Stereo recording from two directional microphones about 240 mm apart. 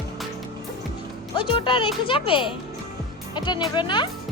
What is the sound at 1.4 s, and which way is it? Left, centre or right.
Speech, left.